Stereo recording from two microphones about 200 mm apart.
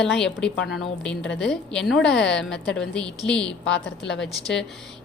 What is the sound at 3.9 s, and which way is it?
Speech, 60° left (ahead or behind).